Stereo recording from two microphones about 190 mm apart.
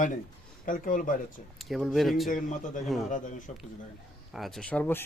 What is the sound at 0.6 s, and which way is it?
Speech, 45° left (ahead or behind).